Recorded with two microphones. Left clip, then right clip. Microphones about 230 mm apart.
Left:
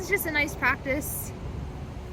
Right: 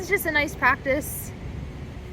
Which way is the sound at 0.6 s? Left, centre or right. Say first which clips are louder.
Right 5 dB; centre.